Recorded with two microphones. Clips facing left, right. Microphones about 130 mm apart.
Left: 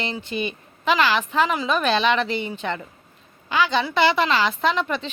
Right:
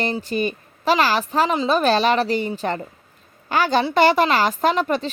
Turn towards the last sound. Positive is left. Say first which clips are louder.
# right 3 dB
turn(degrees=-40)  # may be behind; listen again after turning